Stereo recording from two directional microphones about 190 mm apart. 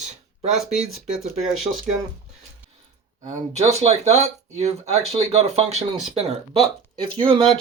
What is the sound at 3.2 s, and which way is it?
Speech, 35° right (ahead or behind).